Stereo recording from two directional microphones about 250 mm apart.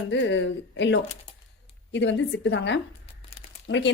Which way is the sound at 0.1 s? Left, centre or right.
Left.